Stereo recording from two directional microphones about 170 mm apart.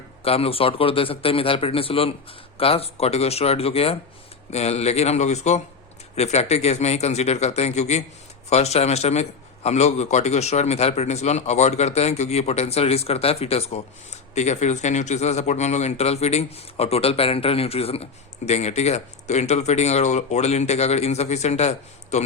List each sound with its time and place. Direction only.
0.2 s a man's voice: 35° left (ahead or behind)